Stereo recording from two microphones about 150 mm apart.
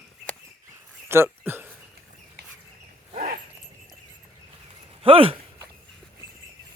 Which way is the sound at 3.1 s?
60° right (ahead or behind).